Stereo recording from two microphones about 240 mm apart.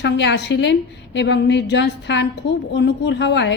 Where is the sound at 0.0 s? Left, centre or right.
Left.